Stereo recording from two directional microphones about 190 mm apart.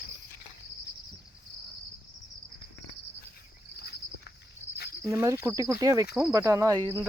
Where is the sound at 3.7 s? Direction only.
55° left (ahead or behind).